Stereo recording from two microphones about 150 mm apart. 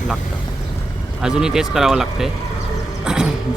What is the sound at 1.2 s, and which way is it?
Speech, 5° right (ahead or behind).